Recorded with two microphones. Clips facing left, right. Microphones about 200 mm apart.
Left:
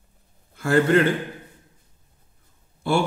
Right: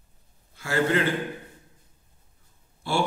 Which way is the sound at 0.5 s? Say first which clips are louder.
Left 6 dB; 55° left (ahead or behind).